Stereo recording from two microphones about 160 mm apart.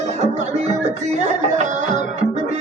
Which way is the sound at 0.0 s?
45° right (ahead or behind).